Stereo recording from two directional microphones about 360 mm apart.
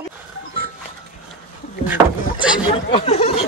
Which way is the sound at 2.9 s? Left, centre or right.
Centre.